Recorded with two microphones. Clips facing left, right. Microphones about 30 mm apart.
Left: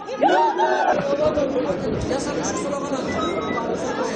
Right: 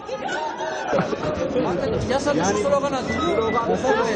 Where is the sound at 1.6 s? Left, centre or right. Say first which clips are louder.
Right 1 dB; centre.